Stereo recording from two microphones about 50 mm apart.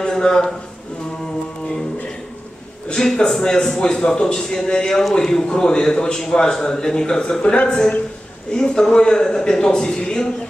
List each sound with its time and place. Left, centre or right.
0.0 s a man's voice: centre
2.9 s a man's voice: centre